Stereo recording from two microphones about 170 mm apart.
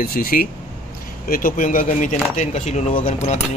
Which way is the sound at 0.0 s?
60° left (ahead or behind).